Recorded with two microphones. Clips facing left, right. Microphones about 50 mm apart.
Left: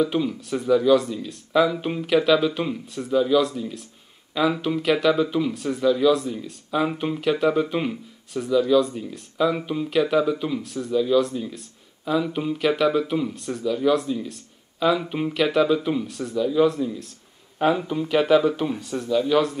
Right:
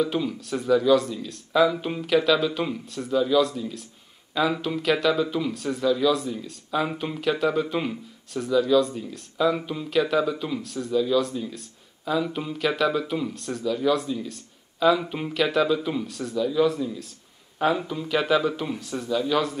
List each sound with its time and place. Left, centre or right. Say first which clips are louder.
0.0 s speech: left 3 dB; centre